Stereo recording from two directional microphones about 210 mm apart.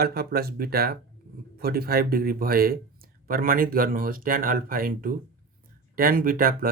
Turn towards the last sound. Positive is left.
turn(degrees=-45)  # may be behind; listen again after turning